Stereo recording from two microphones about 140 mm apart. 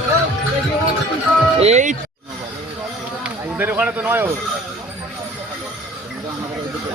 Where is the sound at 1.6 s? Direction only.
60° right (ahead or behind).